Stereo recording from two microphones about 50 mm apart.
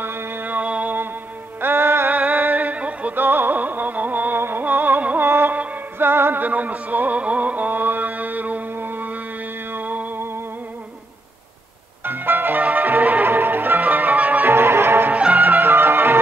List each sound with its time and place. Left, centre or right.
0.0 s music: right
1.6 s music: right
2.3 s music: right
3.2 s music: right
5.9 s music: right
6.4 s music: right
12.0 s music: right
14.4 s music: right
15.0 s music: right
15.4 s music: right